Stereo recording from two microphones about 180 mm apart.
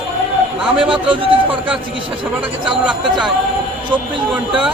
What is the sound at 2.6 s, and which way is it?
Speech, 25° right (ahead or behind).